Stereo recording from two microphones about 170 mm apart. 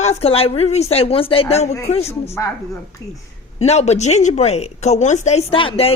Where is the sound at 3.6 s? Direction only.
40° left (ahead or behind).